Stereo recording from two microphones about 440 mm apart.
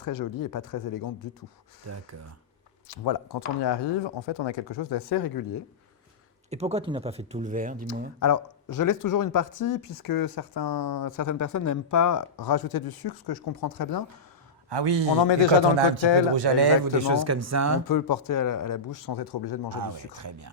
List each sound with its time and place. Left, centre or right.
0.0 s speech: left
1.9 s speech: right
2.9 s speech: left
6.5 s speech: centre
8.2 s speech: left
14.7 s a man's voice: right
15.2 s a man's voice: left
16.3 s speech: right
17.0 s speech: right
17.8 s speech: left
20.2 s speech: right